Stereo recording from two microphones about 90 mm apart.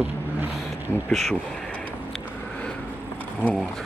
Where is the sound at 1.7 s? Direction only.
15° left (ahead or behind).